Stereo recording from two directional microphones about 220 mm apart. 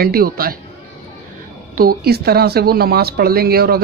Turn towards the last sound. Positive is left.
turn(degrees=-45)  # may be behind; listen again after turning